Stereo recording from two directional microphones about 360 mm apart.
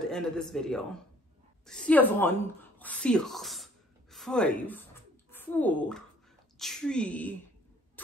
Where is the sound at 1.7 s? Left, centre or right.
Centre.